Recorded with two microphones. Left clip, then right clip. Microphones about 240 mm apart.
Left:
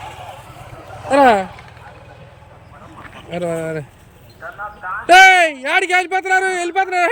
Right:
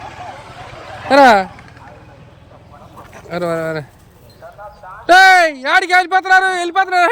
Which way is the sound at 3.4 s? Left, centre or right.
Centre.